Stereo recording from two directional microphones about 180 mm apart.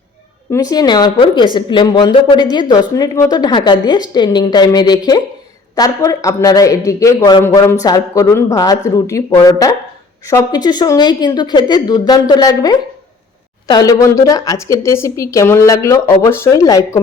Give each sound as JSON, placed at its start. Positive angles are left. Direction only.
{"t": 0.5, "sound": "a woman's voice", "side_deg": 20}